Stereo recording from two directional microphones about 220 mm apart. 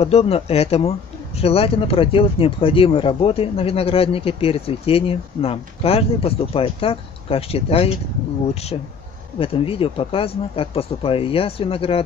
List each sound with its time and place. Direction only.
0.0 s speech: 25° left (ahead or behind)
9.4 s speech: 25° left (ahead or behind)